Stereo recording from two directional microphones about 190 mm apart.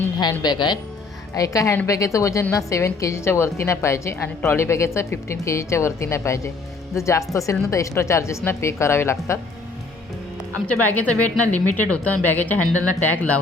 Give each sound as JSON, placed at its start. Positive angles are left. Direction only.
{"t": 0.4, "sound": "a woman's voice", "side_deg": 20}
{"t": 10.7, "sound": "a woman's voice", "side_deg": 10}